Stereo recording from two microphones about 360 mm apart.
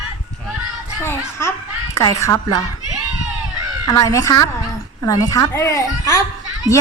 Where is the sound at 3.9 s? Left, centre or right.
Centre.